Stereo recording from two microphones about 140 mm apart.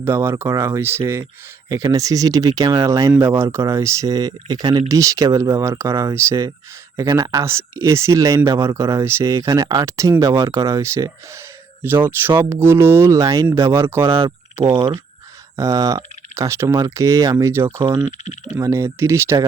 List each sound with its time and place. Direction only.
0.0 s speech: 20° right (ahead or behind)
15.5 s speech: 25° right (ahead or behind)